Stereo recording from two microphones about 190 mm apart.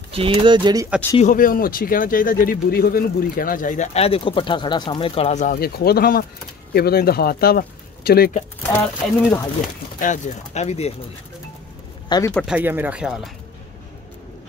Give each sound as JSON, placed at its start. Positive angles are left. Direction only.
{"t": 0.1, "sound": "speech", "side_deg": -30}
{"t": 1.1, "sound": "speech", "side_deg": 45}
{"t": 8.6, "sound": "speech", "side_deg": 10}
{"t": 9.9, "sound": "speech", "side_deg": 40}
{"t": 12.4, "sound": "speech", "side_deg": -5}